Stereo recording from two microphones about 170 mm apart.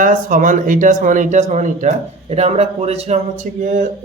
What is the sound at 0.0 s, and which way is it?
Speech, 55° right (ahead or behind).